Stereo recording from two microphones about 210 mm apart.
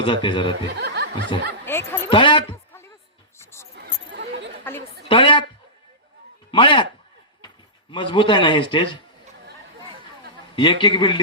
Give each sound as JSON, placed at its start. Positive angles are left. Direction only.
{"t": 0.0, "sound": "a man's voice", "side_deg": 20}
{"t": 0.7, "sound": "snicker", "side_deg": -50}
{"t": 1.6, "sound": "a sound", "side_deg": 10}
{"t": 2.0, "sound": "speech", "side_deg": 25}
{"t": 3.3, "sound": "a sound", "side_deg": 10}
{"t": 3.8, "sound": "chatter", "side_deg": -55}
{"t": 5.0, "sound": "a man's voice", "side_deg": 25}
{"t": 6.5, "sound": "a man's voice", "side_deg": 25}
{"t": 7.4, "sound": "a sound", "side_deg": 20}
{"t": 8.7, "sound": "a man's voice", "side_deg": 25}
{"t": 10.5, "sound": "a man's voice", "side_deg": 20}